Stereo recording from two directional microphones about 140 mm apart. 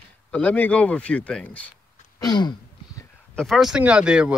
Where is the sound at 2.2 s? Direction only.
30° left (ahead or behind).